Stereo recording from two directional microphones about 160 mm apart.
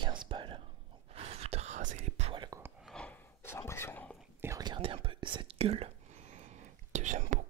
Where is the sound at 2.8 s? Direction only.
5° left (ahead or behind).